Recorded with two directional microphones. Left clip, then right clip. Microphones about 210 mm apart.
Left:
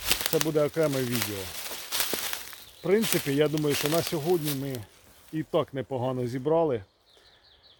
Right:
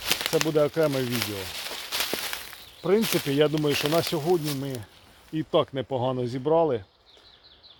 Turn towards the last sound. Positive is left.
turn(degrees=0)  # may be behind; listen again after turning